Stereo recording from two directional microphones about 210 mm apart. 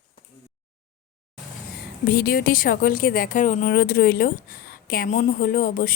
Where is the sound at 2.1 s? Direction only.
45° left (ahead or behind).